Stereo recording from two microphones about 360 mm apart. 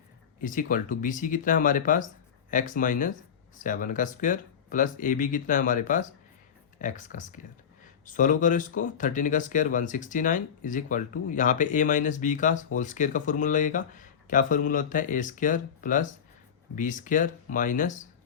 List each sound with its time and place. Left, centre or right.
0.4 s speech: left